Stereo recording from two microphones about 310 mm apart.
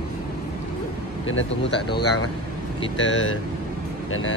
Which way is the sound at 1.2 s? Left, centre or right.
Left.